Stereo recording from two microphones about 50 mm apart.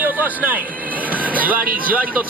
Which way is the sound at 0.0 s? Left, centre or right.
Right.